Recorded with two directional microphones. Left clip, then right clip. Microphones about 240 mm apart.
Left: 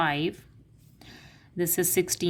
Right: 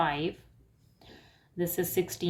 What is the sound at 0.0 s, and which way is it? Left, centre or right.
A woman's voice, left.